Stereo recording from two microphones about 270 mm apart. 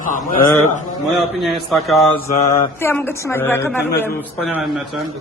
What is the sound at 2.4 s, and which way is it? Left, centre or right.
A man's voice, centre.